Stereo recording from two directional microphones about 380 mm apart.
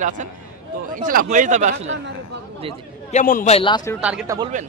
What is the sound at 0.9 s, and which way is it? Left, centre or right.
Speech, right.